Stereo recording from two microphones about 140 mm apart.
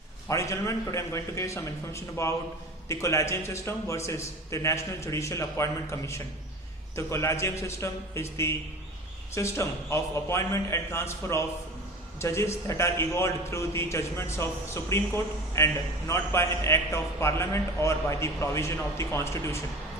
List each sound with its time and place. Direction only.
0.3 s a man's voice: 20° left (ahead or behind)